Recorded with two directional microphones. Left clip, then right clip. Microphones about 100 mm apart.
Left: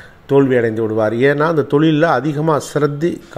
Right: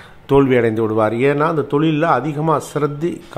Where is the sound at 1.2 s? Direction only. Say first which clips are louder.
Left 2 dB; 15° left (ahead or behind).